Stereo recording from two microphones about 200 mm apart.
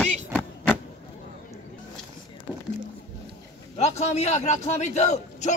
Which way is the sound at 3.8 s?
35° left (ahead or behind).